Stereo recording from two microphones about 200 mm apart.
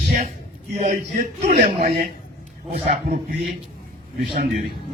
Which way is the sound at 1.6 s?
30° right (ahead or behind).